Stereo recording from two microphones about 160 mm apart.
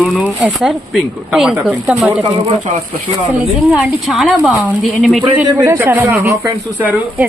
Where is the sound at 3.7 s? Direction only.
Centre (ahead or behind).